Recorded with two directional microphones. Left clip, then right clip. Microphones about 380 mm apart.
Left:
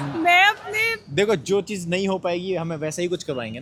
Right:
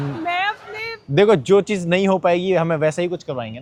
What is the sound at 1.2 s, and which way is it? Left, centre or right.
A man's voice, centre.